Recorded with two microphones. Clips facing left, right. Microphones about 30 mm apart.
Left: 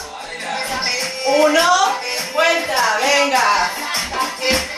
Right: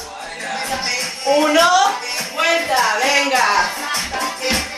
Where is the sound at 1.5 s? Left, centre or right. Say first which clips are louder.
Right 1 dB; centre.